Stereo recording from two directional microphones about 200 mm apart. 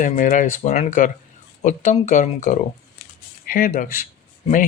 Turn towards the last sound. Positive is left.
turn(degrees=40)  # may be behind; listen again after turning